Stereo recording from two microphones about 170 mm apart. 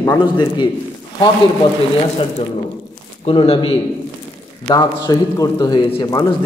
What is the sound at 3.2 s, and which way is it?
Speech, 35° left (ahead or behind).